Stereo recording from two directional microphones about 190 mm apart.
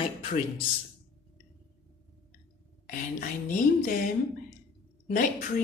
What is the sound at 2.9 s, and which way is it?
A woman's voice, 45° left (ahead or behind).